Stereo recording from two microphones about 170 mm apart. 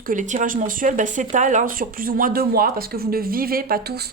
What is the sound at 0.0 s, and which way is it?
Speech, 50° right (ahead or behind).